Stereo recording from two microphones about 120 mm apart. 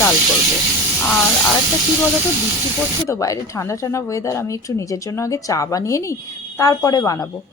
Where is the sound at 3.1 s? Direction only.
25° left (ahead or behind).